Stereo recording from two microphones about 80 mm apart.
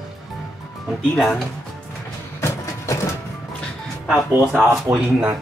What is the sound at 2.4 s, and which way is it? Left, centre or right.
Music, left.